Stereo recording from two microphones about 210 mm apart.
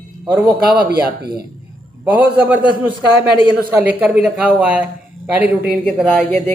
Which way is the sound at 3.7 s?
5° right (ahead or behind).